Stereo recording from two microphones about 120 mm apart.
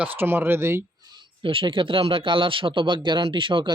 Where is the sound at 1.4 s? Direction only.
45° right (ahead or behind).